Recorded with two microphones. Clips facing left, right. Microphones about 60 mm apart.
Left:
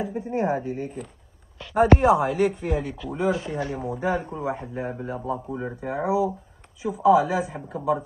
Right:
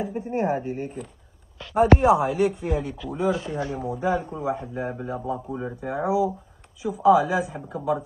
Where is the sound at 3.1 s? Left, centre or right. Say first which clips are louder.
Even; left.